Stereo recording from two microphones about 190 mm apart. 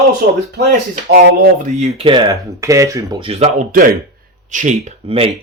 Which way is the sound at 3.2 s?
35° right (ahead or behind).